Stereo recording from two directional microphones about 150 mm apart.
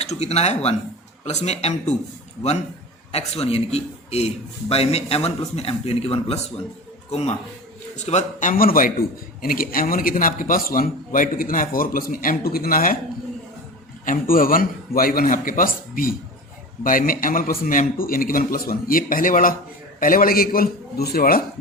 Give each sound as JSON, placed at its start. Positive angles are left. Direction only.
{"t": 0.0, "sound": "a man's voice", "side_deg": 45}
{"t": 3.1, "sound": "a man's voice", "side_deg": 45}
{"t": 14.0, "sound": "a man's voice", "side_deg": 65}